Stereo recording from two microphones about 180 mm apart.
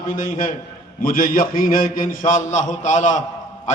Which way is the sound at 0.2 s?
45° left (ahead or behind).